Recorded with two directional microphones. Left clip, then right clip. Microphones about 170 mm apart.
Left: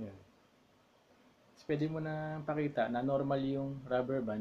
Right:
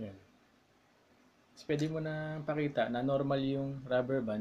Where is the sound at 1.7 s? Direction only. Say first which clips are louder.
Right 1 dB; 15° right (ahead or behind).